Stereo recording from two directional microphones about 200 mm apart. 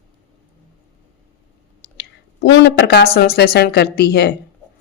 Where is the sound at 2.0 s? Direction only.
60° left (ahead or behind).